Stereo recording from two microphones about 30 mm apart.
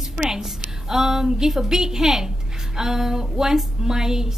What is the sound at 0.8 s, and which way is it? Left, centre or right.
A woman's voice, centre.